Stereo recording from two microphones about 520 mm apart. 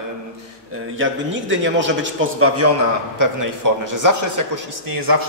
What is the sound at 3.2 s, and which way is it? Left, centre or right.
Speech, right.